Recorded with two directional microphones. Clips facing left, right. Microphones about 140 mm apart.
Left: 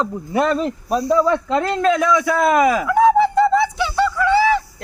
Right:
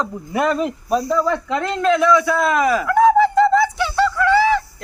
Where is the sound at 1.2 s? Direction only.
30° left (ahead or behind).